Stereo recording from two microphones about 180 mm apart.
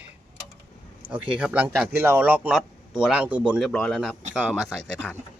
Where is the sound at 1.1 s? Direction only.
5° right (ahead or behind).